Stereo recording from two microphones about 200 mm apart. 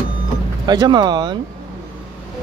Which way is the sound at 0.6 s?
20° right (ahead or behind).